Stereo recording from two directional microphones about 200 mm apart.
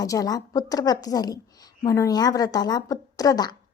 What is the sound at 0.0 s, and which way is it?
A woman's voice, 15° left (ahead or behind).